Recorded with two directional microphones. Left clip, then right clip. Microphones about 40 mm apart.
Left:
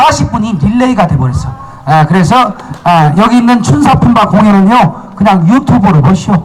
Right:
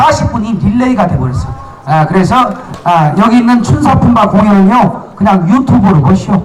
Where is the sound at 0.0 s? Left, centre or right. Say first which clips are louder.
Left 1 dB; centre.